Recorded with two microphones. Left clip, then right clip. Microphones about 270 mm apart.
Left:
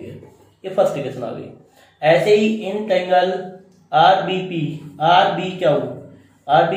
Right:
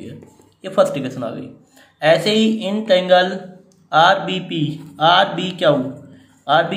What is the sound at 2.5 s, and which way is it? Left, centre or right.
A man's voice, centre.